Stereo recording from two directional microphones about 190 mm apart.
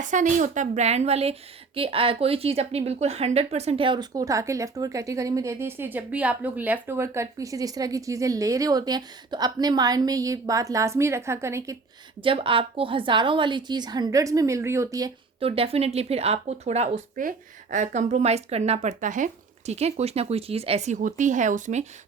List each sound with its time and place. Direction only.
0.0 s speech: 40° right (ahead or behind); by 11.8 s 15° right (ahead or behind)
12.2 s speech: 30° right (ahead or behind)
15.4 s speech: 30° right (ahead or behind)